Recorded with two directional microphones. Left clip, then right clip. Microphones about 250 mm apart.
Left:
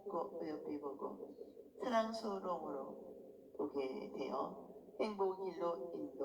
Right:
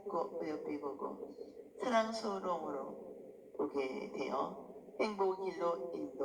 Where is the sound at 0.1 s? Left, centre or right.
Right.